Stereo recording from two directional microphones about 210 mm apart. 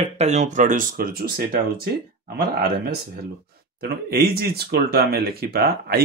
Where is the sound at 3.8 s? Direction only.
45° right (ahead or behind).